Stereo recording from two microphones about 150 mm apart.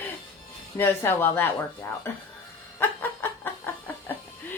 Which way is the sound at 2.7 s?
15° left (ahead or behind).